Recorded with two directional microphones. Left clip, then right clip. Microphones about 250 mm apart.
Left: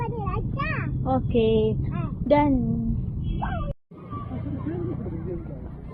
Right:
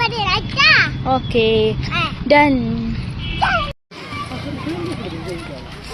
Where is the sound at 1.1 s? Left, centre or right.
Centre.